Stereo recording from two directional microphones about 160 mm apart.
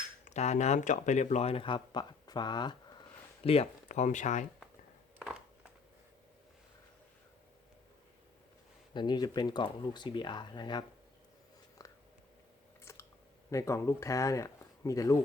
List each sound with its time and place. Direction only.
0.3 s speech: 45° left (ahead or behind); by 2.7 s 30° left (ahead or behind)
3.4 s speech: 40° left (ahead or behind)
8.9 s speech: 30° left (ahead or behind)
11.8 s a sound: 20° left (ahead or behind)
13.5 s speech: 20° left (ahead or behind)